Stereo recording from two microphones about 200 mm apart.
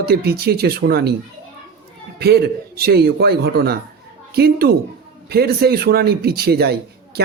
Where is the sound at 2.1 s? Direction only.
55° right (ahead or behind).